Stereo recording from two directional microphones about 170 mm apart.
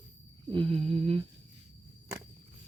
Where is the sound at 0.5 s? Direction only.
30° right (ahead or behind).